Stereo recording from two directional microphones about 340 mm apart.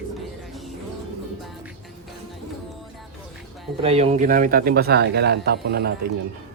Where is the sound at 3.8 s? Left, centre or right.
Centre.